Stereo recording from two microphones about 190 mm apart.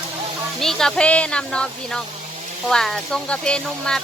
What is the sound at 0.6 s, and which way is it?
Speech, centre (ahead or behind).